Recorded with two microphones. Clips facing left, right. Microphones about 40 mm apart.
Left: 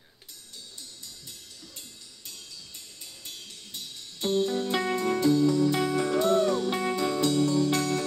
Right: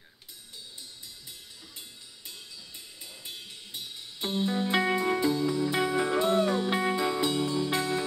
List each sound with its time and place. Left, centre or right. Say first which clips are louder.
1.8 s music: right 1 dB; centre